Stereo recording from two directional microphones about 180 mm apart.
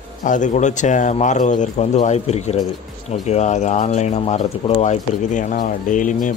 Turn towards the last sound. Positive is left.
turn(degrees=45)  # may be behind; listen again after turning